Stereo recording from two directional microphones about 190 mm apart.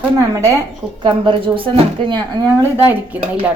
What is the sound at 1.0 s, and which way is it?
Speech, 25° right (ahead or behind).